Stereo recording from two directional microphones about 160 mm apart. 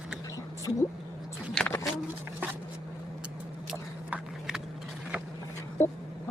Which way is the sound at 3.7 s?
5° right (ahead or behind).